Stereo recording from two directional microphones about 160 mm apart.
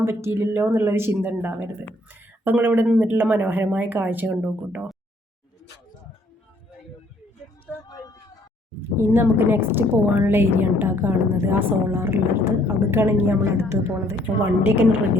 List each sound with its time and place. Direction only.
0.0 s a woman's voice: 15° right (ahead or behind)
7.9 s vehicle: 20° left (ahead or behind)
9.0 s a woman's voice: 15° right (ahead or behind)